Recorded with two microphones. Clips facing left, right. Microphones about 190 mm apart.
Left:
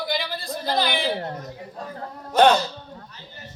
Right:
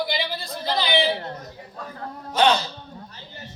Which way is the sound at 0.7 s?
50° left (ahead or behind).